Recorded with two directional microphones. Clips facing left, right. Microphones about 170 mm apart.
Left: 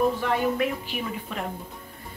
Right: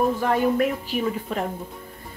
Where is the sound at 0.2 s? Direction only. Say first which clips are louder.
Right 4 dB; 40° right (ahead or behind).